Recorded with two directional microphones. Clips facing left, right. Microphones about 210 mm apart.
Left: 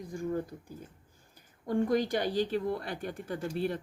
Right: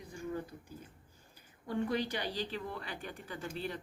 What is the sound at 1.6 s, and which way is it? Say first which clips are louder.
Speech: left 6 dB; 45° left (ahead or behind).